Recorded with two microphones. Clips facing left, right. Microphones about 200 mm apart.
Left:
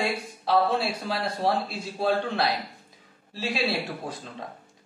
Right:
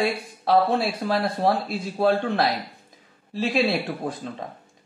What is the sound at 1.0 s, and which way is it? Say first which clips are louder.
Speech: right 5 dB; 50° right (ahead or behind).